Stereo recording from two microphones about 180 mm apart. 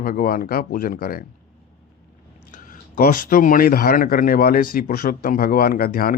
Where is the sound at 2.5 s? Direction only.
50° left (ahead or behind).